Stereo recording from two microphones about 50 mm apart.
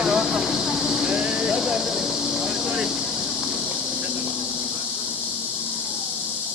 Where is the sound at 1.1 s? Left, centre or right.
Right.